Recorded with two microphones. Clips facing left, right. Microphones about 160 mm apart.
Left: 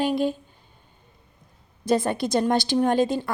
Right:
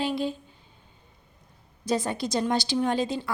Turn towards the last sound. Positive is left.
turn(degrees=50)  # may be behind; listen again after turning